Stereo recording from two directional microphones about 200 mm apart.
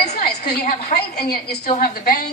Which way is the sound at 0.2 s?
50° left (ahead or behind).